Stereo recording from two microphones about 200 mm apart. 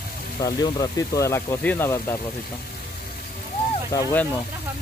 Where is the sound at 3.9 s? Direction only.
20° left (ahead or behind).